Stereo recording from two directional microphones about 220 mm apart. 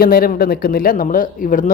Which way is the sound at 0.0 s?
40° left (ahead or behind).